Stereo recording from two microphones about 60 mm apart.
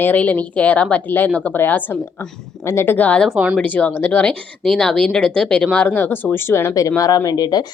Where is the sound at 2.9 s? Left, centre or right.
Left.